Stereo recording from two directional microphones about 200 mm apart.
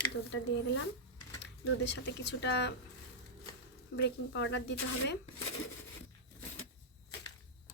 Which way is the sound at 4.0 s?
65° left (ahead or behind).